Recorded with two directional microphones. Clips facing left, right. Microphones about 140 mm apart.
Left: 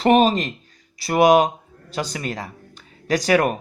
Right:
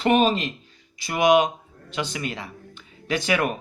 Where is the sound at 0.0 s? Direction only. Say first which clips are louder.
Left 4 dB; 35° left (ahead or behind).